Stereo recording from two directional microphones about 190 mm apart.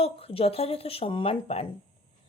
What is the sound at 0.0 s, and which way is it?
Speech, 30° left (ahead or behind).